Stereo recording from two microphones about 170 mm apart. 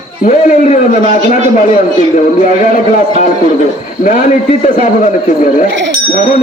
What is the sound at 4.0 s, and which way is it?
A man's voice, 50° left (ahead or behind).